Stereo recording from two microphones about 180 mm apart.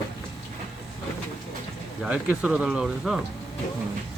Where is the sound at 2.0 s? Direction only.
5° right (ahead or behind).